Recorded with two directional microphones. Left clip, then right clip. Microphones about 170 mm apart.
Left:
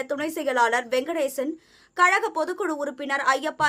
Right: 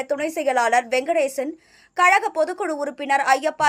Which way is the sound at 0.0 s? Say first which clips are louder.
Right 4 dB; 15° right (ahead or behind).